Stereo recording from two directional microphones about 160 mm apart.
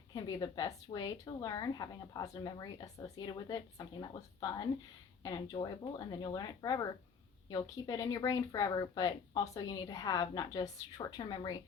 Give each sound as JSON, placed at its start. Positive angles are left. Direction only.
{"t": 0.1, "sound": "a woman's voice", "side_deg": 25}